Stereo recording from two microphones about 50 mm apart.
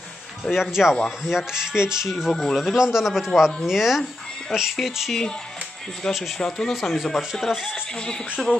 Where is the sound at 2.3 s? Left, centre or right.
Centre.